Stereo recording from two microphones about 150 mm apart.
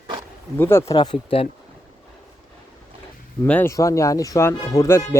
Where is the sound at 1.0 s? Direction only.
35° left (ahead or behind).